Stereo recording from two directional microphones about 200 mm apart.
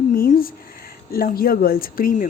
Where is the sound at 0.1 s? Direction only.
45° left (ahead or behind).